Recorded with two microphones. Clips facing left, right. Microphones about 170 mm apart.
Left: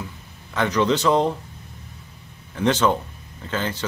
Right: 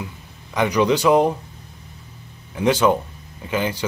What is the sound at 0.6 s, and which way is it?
Speech, 15° right (ahead or behind).